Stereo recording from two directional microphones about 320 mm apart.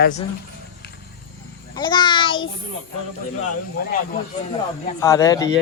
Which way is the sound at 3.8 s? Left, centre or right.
Left.